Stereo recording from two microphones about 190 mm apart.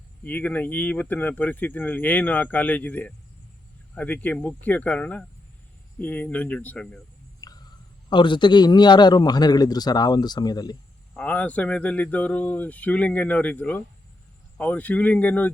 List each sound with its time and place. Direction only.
0.2 s speech: 10° left (ahead or behind)
7.4 s a sound: 20° left (ahead or behind)
8.1 s a man's voice: 25° left (ahead or behind)
11.1 s speech: 5° left (ahead or behind)